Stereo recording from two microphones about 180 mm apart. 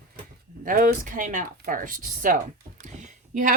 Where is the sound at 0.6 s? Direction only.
50° right (ahead or behind).